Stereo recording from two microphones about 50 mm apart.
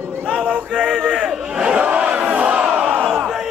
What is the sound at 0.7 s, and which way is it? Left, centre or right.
Speech, centre.